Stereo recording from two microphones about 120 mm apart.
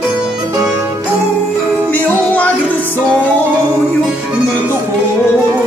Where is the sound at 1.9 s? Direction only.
10° left (ahead or behind).